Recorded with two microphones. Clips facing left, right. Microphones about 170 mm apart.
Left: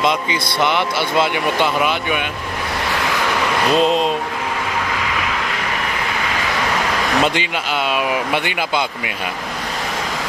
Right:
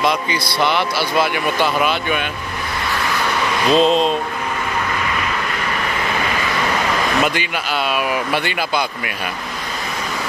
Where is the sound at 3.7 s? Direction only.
10° left (ahead or behind).